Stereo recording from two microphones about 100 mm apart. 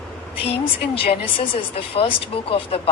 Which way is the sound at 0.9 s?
65° left (ahead or behind).